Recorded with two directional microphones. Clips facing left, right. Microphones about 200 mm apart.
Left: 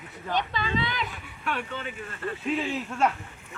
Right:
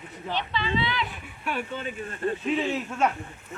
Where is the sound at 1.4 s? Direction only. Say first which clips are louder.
Right 1 dB; 10° right (ahead or behind).